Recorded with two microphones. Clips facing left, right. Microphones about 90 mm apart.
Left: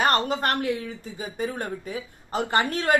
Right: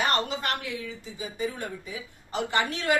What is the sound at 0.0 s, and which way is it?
Speech, 45° left (ahead or behind).